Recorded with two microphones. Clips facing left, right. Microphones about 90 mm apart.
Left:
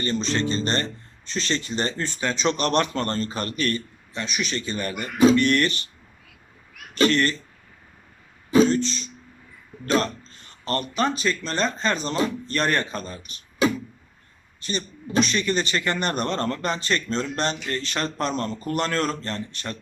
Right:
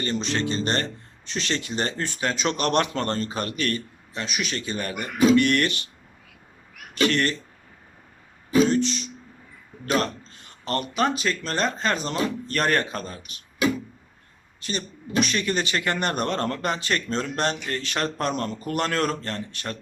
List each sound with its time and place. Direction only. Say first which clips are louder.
0.0 s speech: left 1 dB; 15° right (ahead or behind)
7.0 s speech: left 2 dB; 15° right (ahead or behind)
8.6 s speech: even; 15° right (ahead or behind)
10.0 s a sound: even; 15° right (ahead or behind)
11.2 s speech: left 1 dB; 10° right (ahead or behind)
15.3 s speech: left 1 dB; 10° right (ahead or behind)